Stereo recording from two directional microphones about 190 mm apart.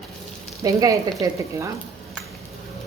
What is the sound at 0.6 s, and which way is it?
Speech, 20° right (ahead or behind).